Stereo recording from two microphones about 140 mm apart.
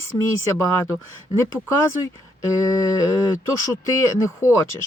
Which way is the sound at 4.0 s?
20° left (ahead or behind).